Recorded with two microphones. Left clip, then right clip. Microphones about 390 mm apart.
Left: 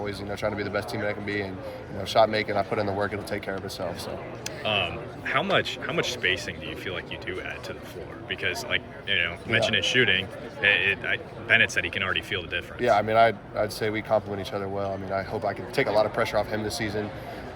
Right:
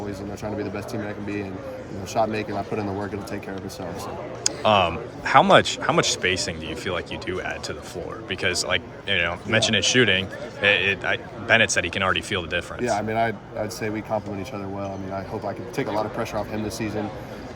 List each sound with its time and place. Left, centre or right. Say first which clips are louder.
0.4 s speech: left 2 dB; centre
2.1 s speech: left 3 dB; centre
4.4 s speech: right 8 dB; centre